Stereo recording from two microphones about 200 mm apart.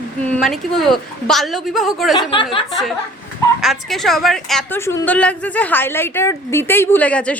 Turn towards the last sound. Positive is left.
turn(degrees=5)  # may be behind; listen again after turning